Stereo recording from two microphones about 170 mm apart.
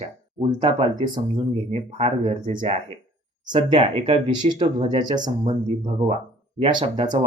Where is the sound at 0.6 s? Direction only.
25° right (ahead or behind).